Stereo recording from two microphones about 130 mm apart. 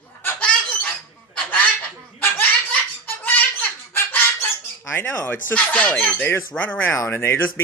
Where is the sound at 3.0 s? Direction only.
15° left (ahead or behind).